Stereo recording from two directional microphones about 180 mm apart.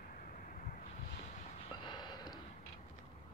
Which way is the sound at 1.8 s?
25° left (ahead or behind).